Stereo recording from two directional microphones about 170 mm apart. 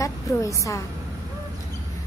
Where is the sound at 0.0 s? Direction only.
20° left (ahead or behind).